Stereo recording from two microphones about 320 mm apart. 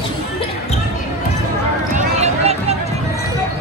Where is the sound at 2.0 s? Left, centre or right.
Centre.